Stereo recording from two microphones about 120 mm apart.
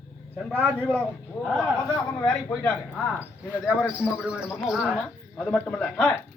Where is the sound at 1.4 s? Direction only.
5° left (ahead or behind).